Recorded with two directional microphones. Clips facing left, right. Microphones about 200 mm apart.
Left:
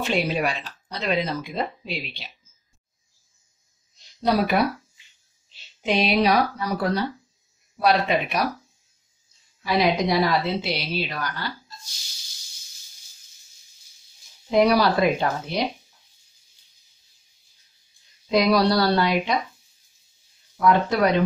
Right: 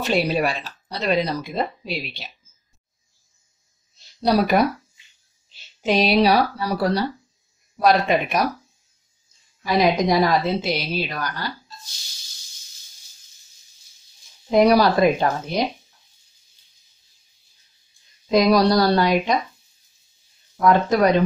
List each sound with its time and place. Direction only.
0.0 s speech: 40° right (ahead or behind)
4.2 s speech: 40° right (ahead or behind)
5.8 s speech: 40° right (ahead or behind)
7.8 s a woman's voice: 45° right (ahead or behind)
9.6 s a woman's voice: 45° right (ahead or behind)
14.5 s a woman's voice: 45° right (ahead or behind)
18.3 s a woman's voice: 45° right (ahead or behind)
20.6 s a woman's voice: 45° right (ahead or behind)